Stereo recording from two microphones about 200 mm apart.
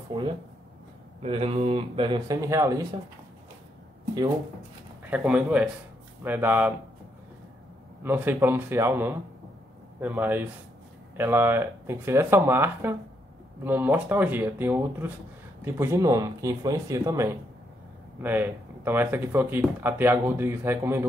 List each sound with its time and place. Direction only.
0.1 s speech: 25° right (ahead or behind)
5.1 s speech: 5° right (ahead or behind)
8.0 s speech: 10° right (ahead or behind)